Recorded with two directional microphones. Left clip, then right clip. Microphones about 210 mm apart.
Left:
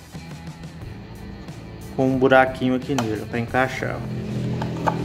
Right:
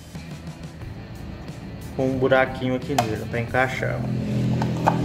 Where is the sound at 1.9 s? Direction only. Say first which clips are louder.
Left 3 dB; 30° left (ahead or behind).